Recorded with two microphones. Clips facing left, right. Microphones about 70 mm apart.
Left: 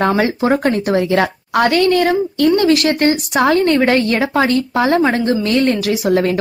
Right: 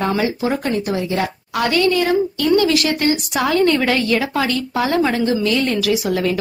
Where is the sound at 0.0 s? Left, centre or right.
Left.